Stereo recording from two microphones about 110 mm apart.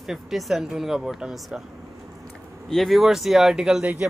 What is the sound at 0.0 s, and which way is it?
Speech, 5° right (ahead or behind).